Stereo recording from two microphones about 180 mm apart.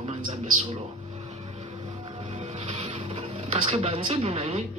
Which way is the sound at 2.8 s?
30° right (ahead or behind).